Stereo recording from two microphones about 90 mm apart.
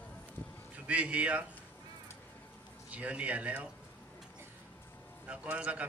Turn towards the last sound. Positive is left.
turn(degrees=-15)  # may be behind; listen again after turning